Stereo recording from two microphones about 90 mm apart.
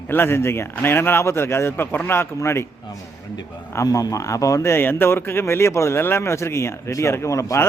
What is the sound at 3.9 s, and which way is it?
Speech, 40° left (ahead or behind).